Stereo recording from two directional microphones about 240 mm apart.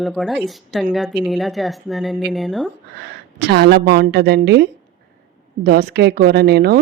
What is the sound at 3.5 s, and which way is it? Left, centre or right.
Speech, right.